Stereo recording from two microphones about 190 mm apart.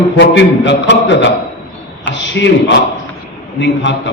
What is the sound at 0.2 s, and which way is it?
A man's voice, 70° left (ahead or behind).